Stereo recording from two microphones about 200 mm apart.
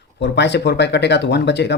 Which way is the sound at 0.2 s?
60° left (ahead or behind).